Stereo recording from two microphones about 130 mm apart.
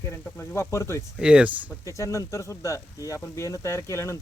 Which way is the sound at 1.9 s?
25° left (ahead or behind).